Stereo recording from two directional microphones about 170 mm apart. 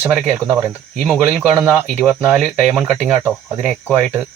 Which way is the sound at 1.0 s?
5° right (ahead or behind).